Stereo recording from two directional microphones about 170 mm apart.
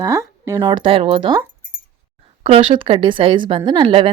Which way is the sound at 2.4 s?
35° right (ahead or behind).